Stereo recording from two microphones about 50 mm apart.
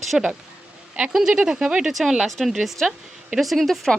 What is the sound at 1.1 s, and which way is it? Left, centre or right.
Speech, centre.